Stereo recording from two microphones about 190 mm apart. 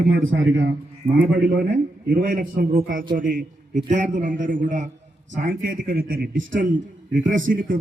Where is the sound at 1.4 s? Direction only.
50° right (ahead or behind).